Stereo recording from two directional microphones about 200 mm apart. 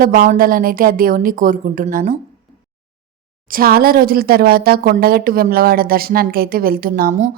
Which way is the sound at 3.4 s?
45° right (ahead or behind).